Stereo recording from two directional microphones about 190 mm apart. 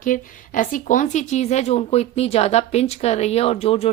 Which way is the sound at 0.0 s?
45° left (ahead or behind).